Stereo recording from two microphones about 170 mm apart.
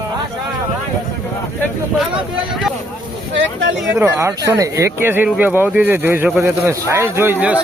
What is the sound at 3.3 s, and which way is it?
Speech, 90° right.